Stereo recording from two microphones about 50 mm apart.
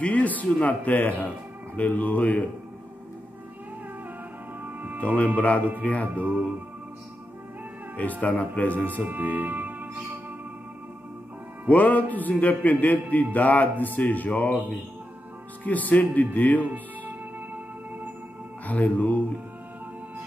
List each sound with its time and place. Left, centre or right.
0.0 s a man's voice: left
4.6 s music: right
5.0 s a man's voice: left
8.2 s a man's voice: left
8.8 s speech: right
11.7 s a man's voice: left
15.6 s a man's voice: left
16.6 s music: right
18.7 s a man's voice: left